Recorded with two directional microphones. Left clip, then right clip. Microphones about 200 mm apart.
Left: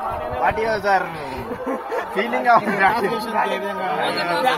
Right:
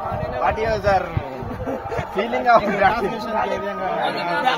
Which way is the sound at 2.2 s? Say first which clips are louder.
Right 1 dB; 45° right (ahead or behind).